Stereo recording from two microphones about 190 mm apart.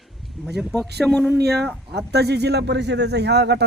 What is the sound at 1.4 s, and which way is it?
A man's voice, 60° right (ahead or behind).